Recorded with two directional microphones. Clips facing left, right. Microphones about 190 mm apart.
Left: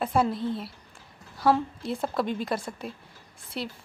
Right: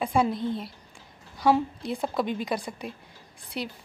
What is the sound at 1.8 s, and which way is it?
A woman's voice, centre (ahead or behind).